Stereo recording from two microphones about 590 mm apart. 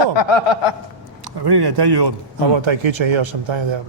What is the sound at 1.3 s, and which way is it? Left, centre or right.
A man's voice, right.